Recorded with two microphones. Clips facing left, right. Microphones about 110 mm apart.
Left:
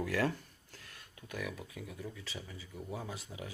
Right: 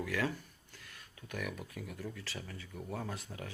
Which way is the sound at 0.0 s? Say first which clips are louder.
Left 2 dB; 40° left (ahead or behind).